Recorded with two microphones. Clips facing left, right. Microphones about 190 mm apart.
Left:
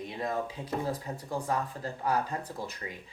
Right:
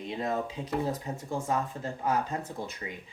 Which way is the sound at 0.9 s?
25° right (ahead or behind).